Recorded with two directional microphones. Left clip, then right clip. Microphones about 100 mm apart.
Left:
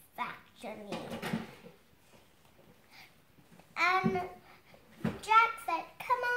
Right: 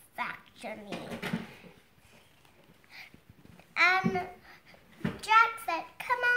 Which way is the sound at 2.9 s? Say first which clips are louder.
Right 7 dB; 30° left (ahead or behind).